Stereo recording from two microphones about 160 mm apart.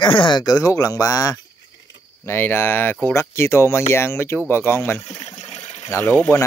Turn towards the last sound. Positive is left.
turn(degrees=15)  # may be behind; listen again after turning